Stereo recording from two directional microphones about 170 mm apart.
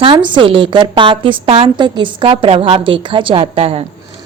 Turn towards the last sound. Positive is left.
turn(degrees=-35)  # may be behind; listen again after turning